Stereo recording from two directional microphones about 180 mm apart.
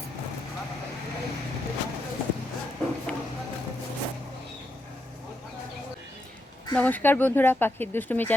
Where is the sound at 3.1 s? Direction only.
5° left (ahead or behind).